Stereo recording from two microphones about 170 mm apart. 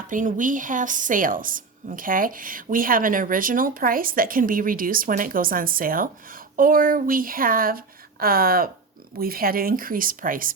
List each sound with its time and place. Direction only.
0.1 s a woman's voice: 50° right (ahead or behind)